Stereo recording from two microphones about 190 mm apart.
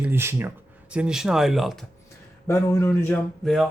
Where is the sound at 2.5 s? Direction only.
15° left (ahead or behind).